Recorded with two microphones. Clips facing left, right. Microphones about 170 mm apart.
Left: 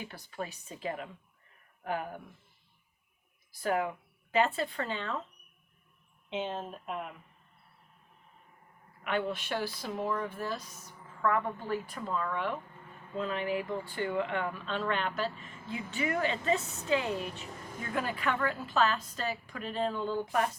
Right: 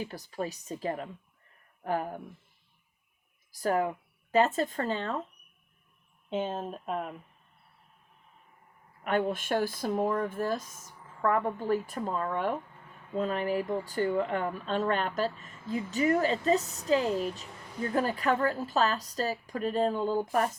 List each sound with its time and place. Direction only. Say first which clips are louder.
0.0 s a woman's voice: right 5 dB; 35° right (ahead or behind)
3.5 s speech: right 3 dB; 40° right (ahead or behind)
6.3 s a woman's voice: right 3 dB; 40° right (ahead or behind)
9.0 s a woman's voice: right 4 dB; 45° right (ahead or behind)